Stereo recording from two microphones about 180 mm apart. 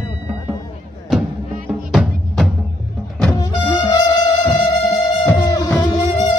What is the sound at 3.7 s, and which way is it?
Music, 20° left (ahead or behind).